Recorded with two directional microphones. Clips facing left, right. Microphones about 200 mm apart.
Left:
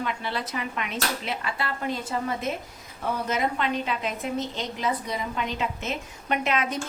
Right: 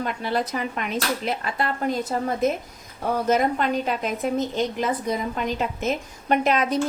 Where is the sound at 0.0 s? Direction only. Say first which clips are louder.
Right 5 dB; 45° right (ahead or behind).